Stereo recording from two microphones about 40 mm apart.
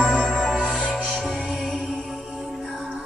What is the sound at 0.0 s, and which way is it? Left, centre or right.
Music, centre.